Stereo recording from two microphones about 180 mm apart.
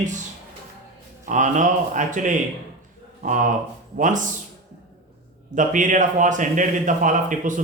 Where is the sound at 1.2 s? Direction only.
45° right (ahead or behind).